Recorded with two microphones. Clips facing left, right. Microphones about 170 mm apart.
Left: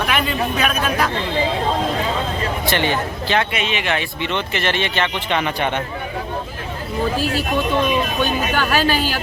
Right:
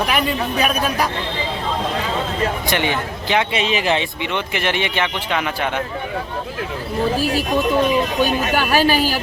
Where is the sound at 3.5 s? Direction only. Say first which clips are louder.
Right 3 dB; 35° right (ahead or behind).